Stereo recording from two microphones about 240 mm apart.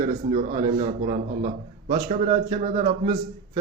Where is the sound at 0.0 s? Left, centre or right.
Right.